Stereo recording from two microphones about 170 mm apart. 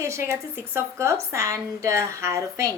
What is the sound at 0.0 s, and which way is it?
A woman's voice, 15° right (ahead or behind).